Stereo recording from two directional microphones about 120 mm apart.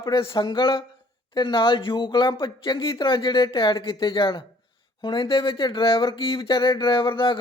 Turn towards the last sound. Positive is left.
turn(degrees=45)  # may be behind; listen again after turning